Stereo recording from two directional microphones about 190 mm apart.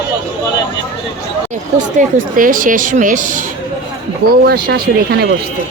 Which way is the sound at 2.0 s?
45° right (ahead or behind).